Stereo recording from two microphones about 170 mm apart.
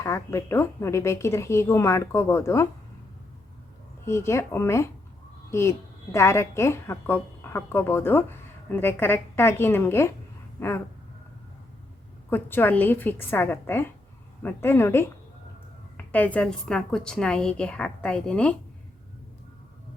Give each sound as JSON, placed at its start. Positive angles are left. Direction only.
{"t": 0.0, "sound": "a woman's voice", "side_deg": 15}
{"t": 4.0, "sound": "a woman's voice", "side_deg": 15}
{"t": 12.3, "sound": "a woman's voice", "side_deg": 10}
{"t": 16.1, "sound": "a woman's voice", "side_deg": 10}